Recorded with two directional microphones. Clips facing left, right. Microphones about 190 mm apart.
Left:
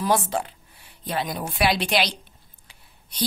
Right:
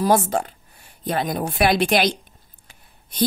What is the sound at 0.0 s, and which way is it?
A woman's voice, 45° right (ahead or behind).